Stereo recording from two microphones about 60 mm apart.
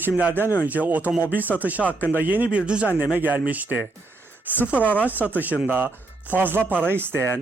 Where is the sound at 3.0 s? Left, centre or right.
Right.